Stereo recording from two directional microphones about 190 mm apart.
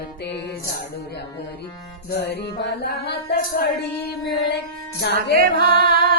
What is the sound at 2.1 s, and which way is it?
Music, 60° left (ahead or behind).